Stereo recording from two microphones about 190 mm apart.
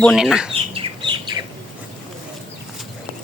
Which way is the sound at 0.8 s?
25° right (ahead or behind).